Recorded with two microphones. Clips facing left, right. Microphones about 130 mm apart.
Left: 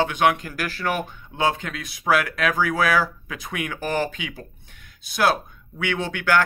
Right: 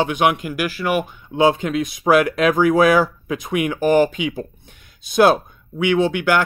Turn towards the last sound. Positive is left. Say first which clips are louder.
# right 6 dB
turn(degrees=-15)  # may be behind; listen again after turning